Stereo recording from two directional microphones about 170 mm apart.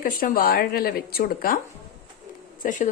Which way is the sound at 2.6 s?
50° left (ahead or behind).